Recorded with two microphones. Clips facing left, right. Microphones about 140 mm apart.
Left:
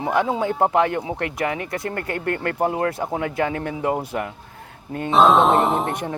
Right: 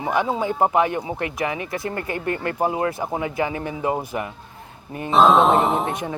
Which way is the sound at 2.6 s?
55° left (ahead or behind).